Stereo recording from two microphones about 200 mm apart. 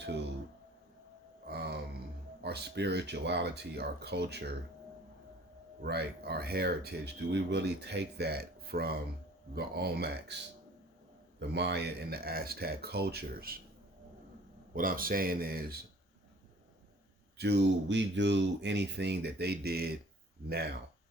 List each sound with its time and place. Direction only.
1.5 s a sound: 55° right (ahead or behind)
2.4 s speech: 55° right (ahead or behind)
5.8 s speech: 55° right (ahead or behind)
11.3 s speech: 60° right (ahead or behind)
14.7 s speech: 45° right (ahead or behind)
17.3 s speech: 55° right (ahead or behind)